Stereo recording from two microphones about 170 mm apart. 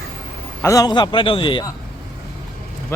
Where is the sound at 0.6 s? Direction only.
20° left (ahead or behind).